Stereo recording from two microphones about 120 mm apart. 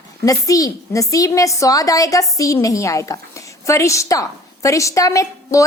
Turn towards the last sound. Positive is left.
turn(degrees=25)  # may be behind; listen again after turning